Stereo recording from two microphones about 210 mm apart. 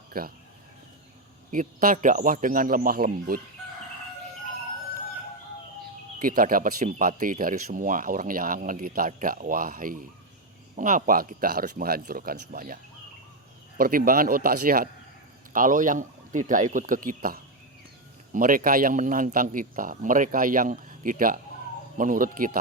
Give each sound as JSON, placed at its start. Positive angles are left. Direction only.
{"t": 0.1, "sound": "speech", "side_deg": -45}
{"t": 1.5, "sound": "speech", "side_deg": -40}
{"t": 6.1, "sound": "speech", "side_deg": -40}